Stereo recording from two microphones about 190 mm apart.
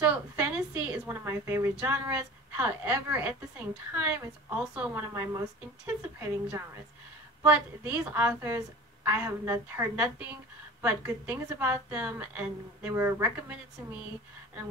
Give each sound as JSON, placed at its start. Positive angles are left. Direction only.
{"t": 0.0, "sound": "a woman's voice", "side_deg": -5}